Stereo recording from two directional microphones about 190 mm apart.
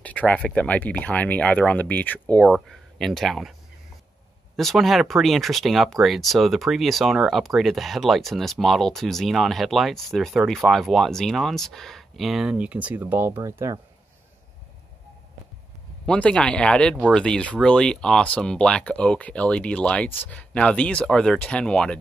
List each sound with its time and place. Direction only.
0.0 s speech: 10° left (ahead or behind)
4.6 s speech: centre (ahead or behind); by 13.7 s 15° right (ahead or behind)
16.1 s speech: 5° left (ahead or behind)